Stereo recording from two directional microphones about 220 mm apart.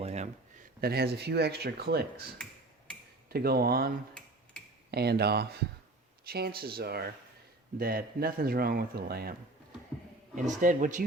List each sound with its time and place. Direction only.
0.0 s a sound: 30° right (ahead or behind)
0.8 s speech: 45° right (ahead or behind)
3.2 s speech: 45° right (ahead or behind)
10.3 s speech: 35° right (ahead or behind)